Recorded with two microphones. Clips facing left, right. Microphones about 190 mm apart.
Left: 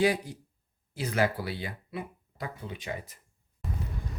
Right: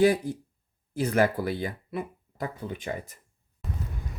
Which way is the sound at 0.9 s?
45° right (ahead or behind).